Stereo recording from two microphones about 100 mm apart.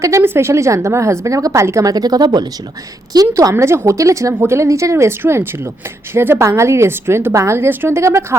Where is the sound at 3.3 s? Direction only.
30° right (ahead or behind).